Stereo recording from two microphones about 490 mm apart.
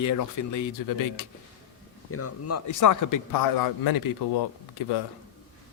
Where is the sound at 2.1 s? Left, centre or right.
Left.